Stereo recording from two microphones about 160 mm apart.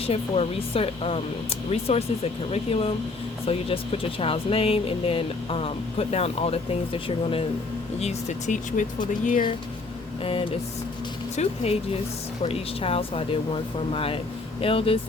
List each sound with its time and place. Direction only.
0.0 s speech: 40° left (ahead or behind); by 9.5 s 55° left (ahead or behind)
10.2 s speech: 35° left (ahead or behind)